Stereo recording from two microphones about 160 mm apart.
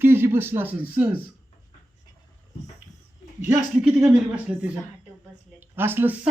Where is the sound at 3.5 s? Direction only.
5° right (ahead or behind).